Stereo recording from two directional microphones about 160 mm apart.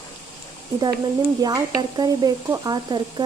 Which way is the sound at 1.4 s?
25° right (ahead or behind).